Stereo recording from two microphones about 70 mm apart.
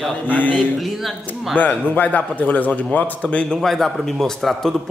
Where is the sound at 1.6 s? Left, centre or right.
Left.